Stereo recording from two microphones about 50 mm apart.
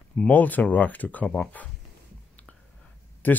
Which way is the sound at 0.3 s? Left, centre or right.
Left.